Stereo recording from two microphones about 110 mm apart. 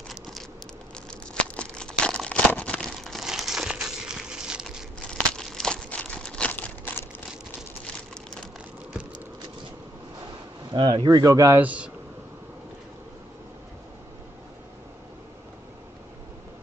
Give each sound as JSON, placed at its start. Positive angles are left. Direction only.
{"t": 1.3, "sound": "crumpling", "side_deg": 10}
{"t": 5.0, "sound": "crumpling", "side_deg": 5}
{"t": 10.7, "sound": "speech", "side_deg": -40}
{"t": 11.6, "sound": "speech", "side_deg": -10}